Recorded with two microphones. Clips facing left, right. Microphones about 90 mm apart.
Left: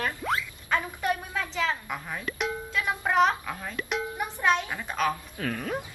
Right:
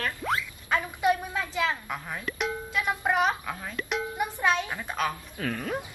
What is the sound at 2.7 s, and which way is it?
Speech, 15° right (ahead or behind).